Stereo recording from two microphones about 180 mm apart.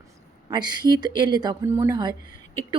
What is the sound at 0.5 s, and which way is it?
Speech, 25° right (ahead or behind).